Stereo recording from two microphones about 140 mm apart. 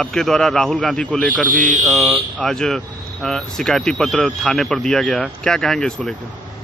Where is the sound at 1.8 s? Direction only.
Centre (ahead or behind).